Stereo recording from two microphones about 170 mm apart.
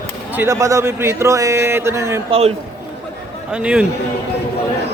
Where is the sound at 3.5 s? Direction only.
5° right (ahead or behind).